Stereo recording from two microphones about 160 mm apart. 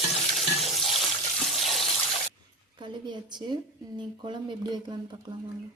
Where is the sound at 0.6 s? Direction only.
Centre (ahead or behind).